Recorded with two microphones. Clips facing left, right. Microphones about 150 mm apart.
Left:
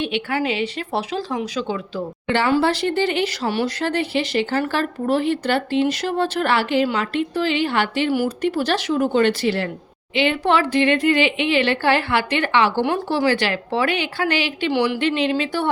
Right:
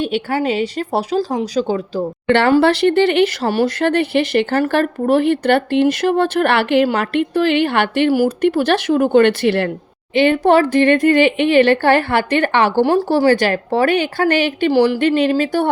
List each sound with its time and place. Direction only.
0.0 s speech: 40° right (ahead or behind)
2.2 s speech: 65° right (ahead or behind)
10.2 s a woman's voice: 45° right (ahead or behind)
12.8 s a woman's voice: 35° right (ahead or behind)